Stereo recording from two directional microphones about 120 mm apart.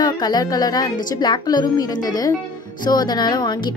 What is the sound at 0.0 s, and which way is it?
Speech, 35° left (ahead or behind).